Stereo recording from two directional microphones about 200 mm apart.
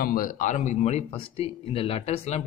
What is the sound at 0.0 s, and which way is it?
Speech, 45° left (ahead or behind).